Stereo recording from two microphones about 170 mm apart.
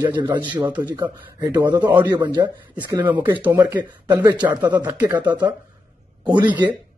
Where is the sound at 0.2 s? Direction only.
25° right (ahead or behind).